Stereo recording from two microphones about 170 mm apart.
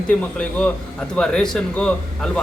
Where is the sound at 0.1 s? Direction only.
10° left (ahead or behind).